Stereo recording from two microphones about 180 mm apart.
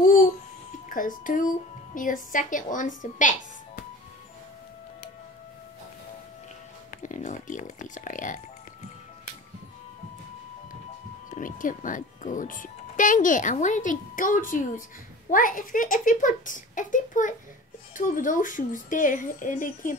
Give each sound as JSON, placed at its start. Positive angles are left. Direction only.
{"t": 0.0, "sound": "babbling", "side_deg": 50}
{"t": 0.8, "sound": "speech", "side_deg": 50}
{"t": 7.0, "sound": "speech", "side_deg": 45}
{"t": 11.2, "sound": "speech", "side_deg": 45}